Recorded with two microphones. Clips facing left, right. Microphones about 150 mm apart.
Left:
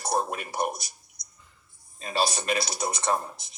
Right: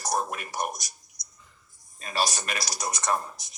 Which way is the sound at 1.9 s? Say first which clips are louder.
Left 2 dB; 25° left (ahead or behind).